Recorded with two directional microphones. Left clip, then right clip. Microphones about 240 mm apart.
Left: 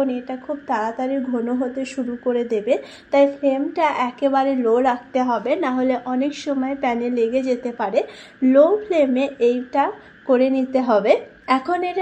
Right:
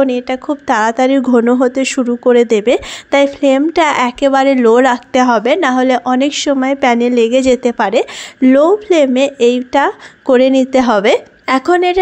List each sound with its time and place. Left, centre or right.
0.0 s a woman's voice: right